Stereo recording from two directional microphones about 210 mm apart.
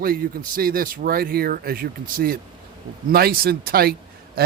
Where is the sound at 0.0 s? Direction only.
45° right (ahead or behind).